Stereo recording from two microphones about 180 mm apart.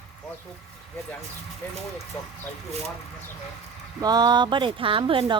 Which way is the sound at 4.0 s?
20° right (ahead or behind).